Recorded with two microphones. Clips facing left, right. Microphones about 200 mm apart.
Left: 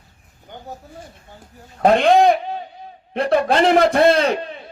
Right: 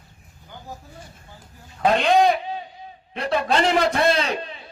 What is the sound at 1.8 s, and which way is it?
A man's voice, 55° left (ahead or behind).